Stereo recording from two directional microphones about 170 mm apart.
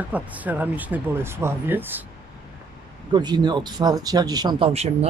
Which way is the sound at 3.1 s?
25° right (ahead or behind).